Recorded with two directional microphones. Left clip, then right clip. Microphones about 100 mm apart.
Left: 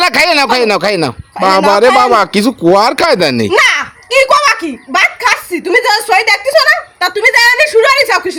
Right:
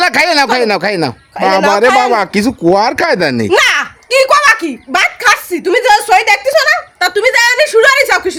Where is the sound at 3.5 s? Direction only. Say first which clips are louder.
Right 1 dB; 60° right (ahead or behind); by 7.5 s 40° right (ahead or behind).